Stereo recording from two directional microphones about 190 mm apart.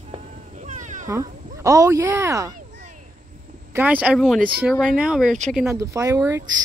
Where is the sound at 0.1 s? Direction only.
40° right (ahead or behind).